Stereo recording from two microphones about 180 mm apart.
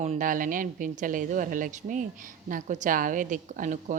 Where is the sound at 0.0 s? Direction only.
45° right (ahead or behind).